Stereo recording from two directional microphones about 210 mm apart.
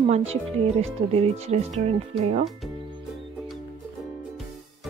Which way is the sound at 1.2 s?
30° right (ahead or behind).